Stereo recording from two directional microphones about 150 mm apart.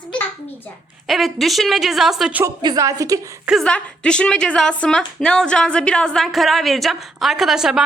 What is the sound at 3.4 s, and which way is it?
Speech, centre (ahead or behind).